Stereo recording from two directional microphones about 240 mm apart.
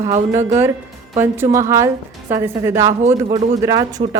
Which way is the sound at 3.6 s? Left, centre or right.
Centre.